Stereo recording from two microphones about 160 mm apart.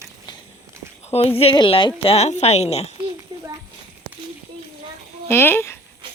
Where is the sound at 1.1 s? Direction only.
40° left (ahead or behind).